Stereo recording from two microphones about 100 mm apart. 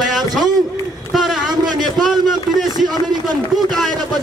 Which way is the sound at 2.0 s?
Centre (ahead or behind).